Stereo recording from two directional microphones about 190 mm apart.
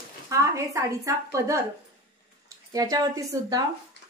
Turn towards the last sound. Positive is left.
turn(degrees=-20)  # may be behind; listen again after turning